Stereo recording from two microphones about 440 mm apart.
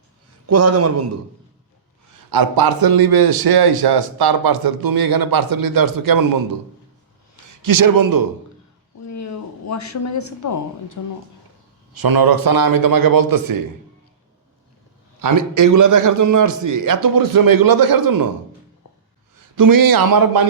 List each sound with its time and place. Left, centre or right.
0.4 s a man's voice: right
2.3 s a man's voice: right
7.6 s a man's voice: right
9.0 s speech: left
11.9 s a man's voice: right
15.2 s a man's voice: right
19.5 s a man's voice: right